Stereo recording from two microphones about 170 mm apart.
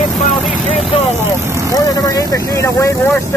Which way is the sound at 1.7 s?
20° left (ahead or behind).